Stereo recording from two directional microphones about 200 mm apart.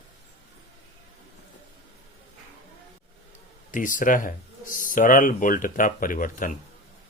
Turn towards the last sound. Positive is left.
turn(degrees=40)  # may be behind; listen again after turning